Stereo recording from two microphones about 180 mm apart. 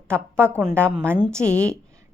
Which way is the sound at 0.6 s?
10° right (ahead or behind).